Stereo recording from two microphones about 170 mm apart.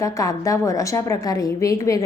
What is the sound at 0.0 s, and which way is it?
A woman's voice, 20° left (ahead or behind).